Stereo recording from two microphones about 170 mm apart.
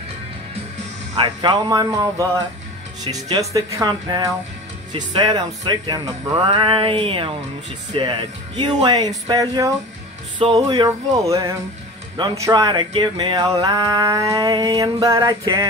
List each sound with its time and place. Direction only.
1.1 s speech: 30° right (ahead or behind)